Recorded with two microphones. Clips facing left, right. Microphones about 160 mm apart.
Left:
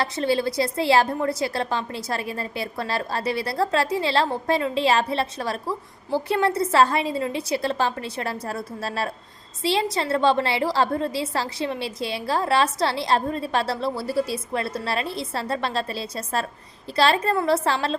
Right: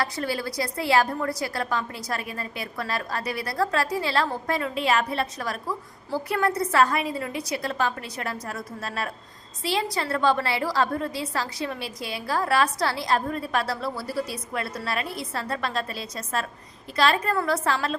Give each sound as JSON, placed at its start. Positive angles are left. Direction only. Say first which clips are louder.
{"t": 0.0, "sound": "a woman's voice", "louder": "left 5 dB", "side_deg": 25}